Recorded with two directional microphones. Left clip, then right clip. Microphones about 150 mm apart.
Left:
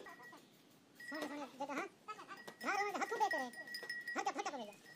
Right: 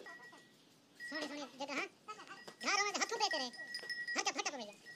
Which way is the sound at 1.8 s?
20° right (ahead or behind).